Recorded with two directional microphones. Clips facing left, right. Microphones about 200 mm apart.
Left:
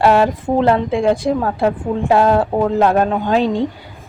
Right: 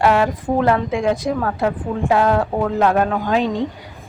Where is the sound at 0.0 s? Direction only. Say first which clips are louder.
Left 3 dB; 30° left (ahead or behind).